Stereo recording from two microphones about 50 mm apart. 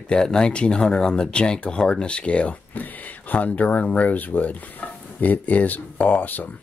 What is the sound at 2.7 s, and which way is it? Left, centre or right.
Speech, left.